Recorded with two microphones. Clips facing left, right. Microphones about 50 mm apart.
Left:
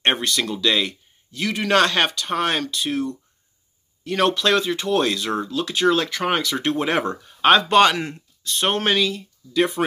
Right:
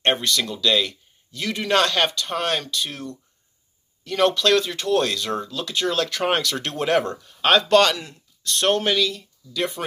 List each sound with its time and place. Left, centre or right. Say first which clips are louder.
0.0 s speech: even; left
6.0 s speech: even; centre
7.9 s speech: left 4 dB; left
8.5 s speech: right 2 dB; centre
8.7 s speech: left 1 dB; left